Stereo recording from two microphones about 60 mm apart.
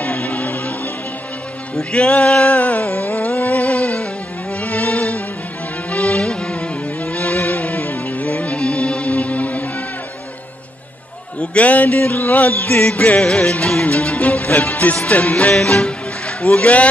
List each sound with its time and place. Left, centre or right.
0.0 s music: left
1.8 s music: centre
11.3 s music: left